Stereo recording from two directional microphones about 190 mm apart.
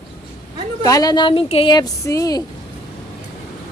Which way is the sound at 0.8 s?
20° left (ahead or behind).